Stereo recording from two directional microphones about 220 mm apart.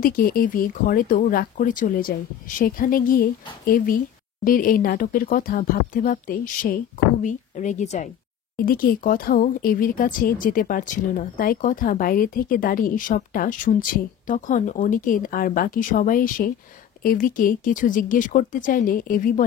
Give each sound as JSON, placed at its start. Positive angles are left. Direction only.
{"t": 0.0, "sound": "speech", "side_deg": 40}